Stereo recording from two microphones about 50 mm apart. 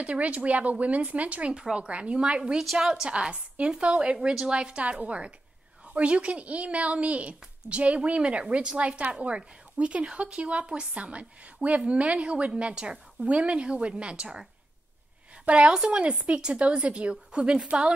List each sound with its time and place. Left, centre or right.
0.0 s a woman's voice: right
2.6 s a woman's voice: centre
2.9 s a woman's voice: centre
15.4 s a woman's voice: right